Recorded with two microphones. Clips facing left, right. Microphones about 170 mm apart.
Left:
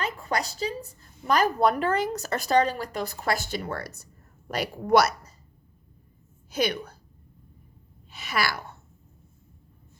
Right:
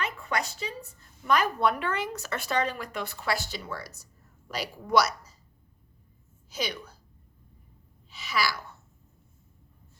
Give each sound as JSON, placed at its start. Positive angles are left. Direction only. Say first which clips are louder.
{"t": 0.0, "sound": "a woman's voice", "louder": "left 2 dB", "side_deg": 35}
{"t": 6.5, "sound": "a woman's voice", "louder": "left 7 dB", "side_deg": 55}
{"t": 8.1, "sound": "a woman's voice", "louder": "left 1 dB", "side_deg": 55}